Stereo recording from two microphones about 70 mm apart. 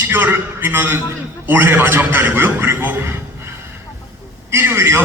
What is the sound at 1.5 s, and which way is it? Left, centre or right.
A man's voice, right.